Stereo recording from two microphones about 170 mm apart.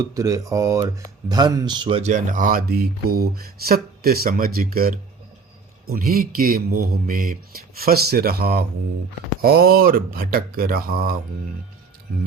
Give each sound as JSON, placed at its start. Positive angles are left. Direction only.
{"t": 0.0, "sound": "speech", "side_deg": -20}
{"t": 2.0, "sound": "speech", "side_deg": -45}